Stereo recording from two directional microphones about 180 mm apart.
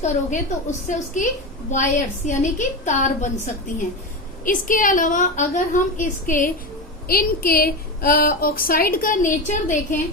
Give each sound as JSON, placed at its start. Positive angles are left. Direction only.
{"t": 0.9, "sound": "a woman's voice", "side_deg": 45}